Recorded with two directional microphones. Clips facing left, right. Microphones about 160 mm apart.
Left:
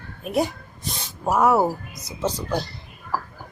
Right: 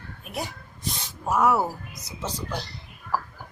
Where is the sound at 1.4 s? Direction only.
40° left (ahead or behind).